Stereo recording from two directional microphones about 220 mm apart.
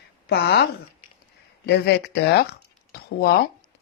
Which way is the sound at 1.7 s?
50° left (ahead or behind).